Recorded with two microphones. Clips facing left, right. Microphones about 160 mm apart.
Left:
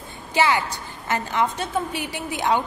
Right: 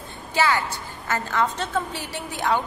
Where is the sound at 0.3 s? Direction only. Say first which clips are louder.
Left 2 dB; 15° left (ahead or behind).